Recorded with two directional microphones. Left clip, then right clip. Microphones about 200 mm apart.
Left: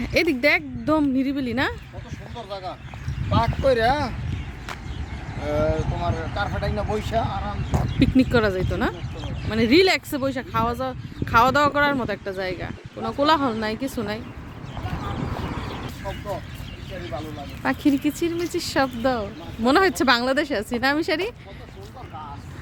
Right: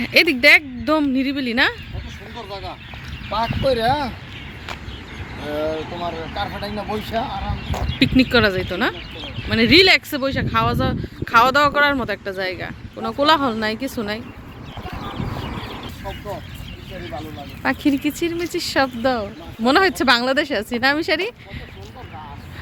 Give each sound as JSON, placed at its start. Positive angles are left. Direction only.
{"t": 0.0, "sound": "speech", "side_deg": 5}
{"t": 2.5, "sound": "speech", "side_deg": 35}
{"t": 3.2, "sound": "speech", "side_deg": 5}
{"t": 6.3, "sound": "speech", "side_deg": 0}
{"t": 7.9, "sound": "speech", "side_deg": 10}
{"t": 17.6, "sound": "speech", "side_deg": 0}